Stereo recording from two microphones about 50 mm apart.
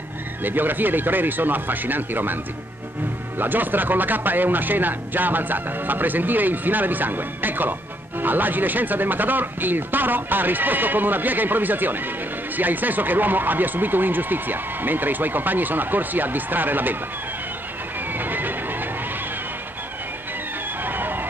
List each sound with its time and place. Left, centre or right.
0.4 s speech: right
3.3 s speech: right
18.1 s train: right
20.8 s music: right